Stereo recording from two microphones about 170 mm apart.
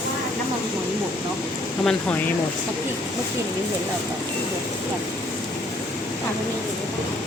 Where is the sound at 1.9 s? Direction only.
10° left (ahead or behind).